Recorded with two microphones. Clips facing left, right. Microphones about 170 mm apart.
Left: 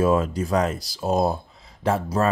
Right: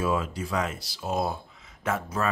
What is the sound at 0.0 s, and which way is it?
Speech, 40° left (ahead or behind).